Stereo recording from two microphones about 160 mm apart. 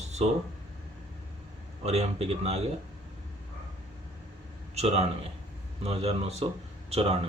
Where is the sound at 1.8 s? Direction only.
40° right (ahead or behind).